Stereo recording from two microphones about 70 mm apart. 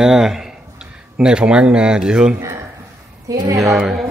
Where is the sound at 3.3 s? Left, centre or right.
Right.